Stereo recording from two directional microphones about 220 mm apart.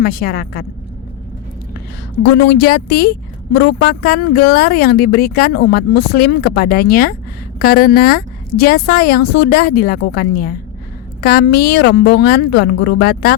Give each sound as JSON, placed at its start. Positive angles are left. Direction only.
{"t": 0.0, "sound": "speech", "side_deg": 40}
{"t": 2.2, "sound": "a woman's voice", "side_deg": 50}